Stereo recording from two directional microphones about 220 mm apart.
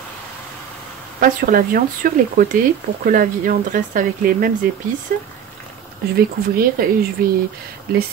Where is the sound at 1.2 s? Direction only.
40° right (ahead or behind).